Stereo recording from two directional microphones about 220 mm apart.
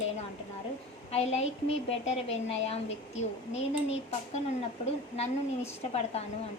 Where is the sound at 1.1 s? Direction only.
30° left (ahead or behind).